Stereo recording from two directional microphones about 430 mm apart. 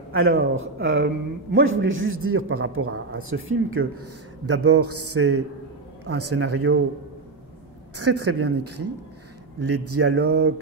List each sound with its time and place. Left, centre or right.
0.1 s a man's voice: right
8.0 s a man's voice: right